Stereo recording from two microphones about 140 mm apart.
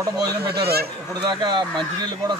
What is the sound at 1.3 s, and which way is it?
Speech, 30° right (ahead or behind).